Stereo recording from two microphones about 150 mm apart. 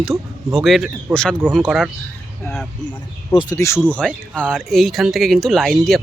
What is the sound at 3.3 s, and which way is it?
Speech, 30° left (ahead or behind).